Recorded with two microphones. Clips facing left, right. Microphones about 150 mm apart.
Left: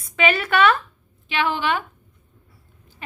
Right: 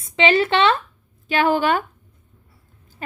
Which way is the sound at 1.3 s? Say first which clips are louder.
Right 5 dB; 45° right (ahead or behind).